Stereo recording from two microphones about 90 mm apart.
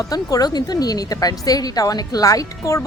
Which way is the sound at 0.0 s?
40° left (ahead or behind).